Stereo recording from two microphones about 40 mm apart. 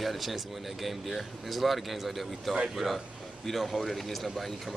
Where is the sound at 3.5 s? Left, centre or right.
Centre.